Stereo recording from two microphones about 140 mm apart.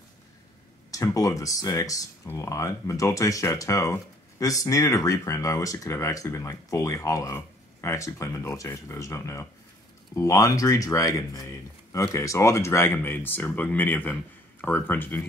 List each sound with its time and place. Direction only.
0.9 s speech: 25° left (ahead or behind)